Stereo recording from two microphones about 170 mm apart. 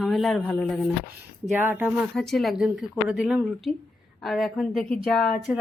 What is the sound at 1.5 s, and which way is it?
Speech, 10° right (ahead or behind).